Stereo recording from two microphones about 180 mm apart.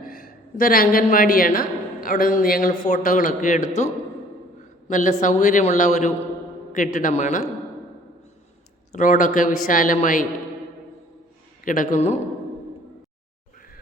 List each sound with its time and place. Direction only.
0.0 s a woman's voice: 55° left (ahead or behind)
4.9 s speech: 45° left (ahead or behind)
8.9 s speech: 45° left (ahead or behind)
11.6 s speech: 45° left (ahead or behind)